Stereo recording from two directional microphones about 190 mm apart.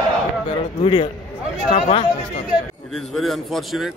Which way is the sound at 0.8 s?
25° left (ahead or behind).